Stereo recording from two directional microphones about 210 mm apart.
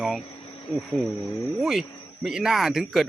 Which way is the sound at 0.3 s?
25° left (ahead or behind).